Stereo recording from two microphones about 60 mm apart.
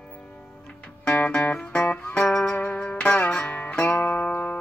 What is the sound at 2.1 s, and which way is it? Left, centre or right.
Music, centre.